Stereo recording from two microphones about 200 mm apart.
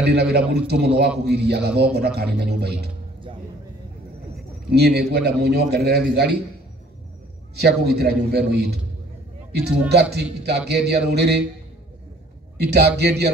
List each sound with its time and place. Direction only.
0.1 s a man's voice: 55° right (ahead or behind)
4.6 s a man's voice: 55° right (ahead or behind)
7.5 s a man's voice: 55° right (ahead or behind)
9.8 s a man's voice: 55° right (ahead or behind)
12.5 s a man's voice: 55° right (ahead or behind)